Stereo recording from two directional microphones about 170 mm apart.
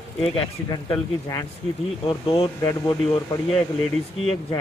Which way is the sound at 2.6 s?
20° left (ahead or behind).